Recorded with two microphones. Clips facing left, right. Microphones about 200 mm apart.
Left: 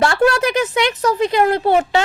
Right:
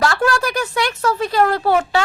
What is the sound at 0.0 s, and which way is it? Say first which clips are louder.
Speech: left 3 dB; 25° left (ahead or behind).